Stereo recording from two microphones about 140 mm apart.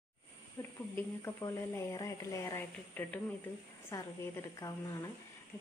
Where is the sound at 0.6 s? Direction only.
20° left (ahead or behind).